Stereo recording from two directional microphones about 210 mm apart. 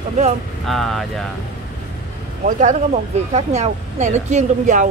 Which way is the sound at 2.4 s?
35° right (ahead or behind).